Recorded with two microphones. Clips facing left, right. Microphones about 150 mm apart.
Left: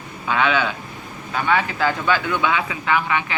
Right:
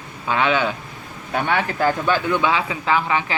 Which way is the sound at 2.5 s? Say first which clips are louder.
Right 1 dB; 30° right (ahead or behind).